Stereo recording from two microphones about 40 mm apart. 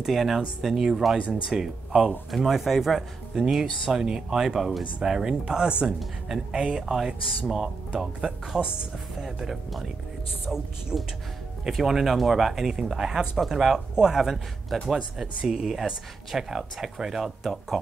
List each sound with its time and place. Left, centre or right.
0.0 s speech: centre
5.4 s speech: right
6.2 s speech: centre
9.2 s speech: centre
12.9 s speech: centre
15.1 s speech: centre